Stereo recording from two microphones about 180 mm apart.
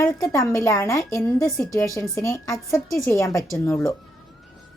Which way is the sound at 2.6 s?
Centre (ahead or behind).